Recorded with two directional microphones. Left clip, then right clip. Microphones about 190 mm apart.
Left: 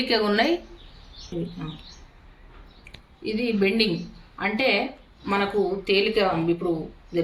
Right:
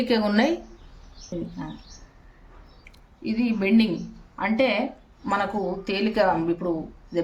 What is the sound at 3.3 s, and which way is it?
A woman's voice, 55° right (ahead or behind).